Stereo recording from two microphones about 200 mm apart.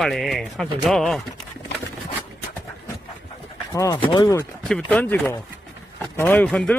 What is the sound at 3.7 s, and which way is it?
Speech, 15° left (ahead or behind).